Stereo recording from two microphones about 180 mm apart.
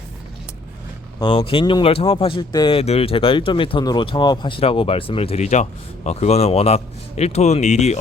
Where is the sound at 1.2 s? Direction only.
30° left (ahead or behind).